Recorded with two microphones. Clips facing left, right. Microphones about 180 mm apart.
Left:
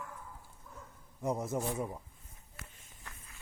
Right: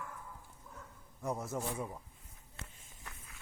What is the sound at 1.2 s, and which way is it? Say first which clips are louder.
Speech: left 4 dB; 20° left (ahead or behind).